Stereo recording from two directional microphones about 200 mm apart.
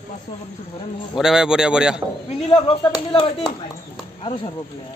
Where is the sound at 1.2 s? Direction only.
5° right (ahead or behind).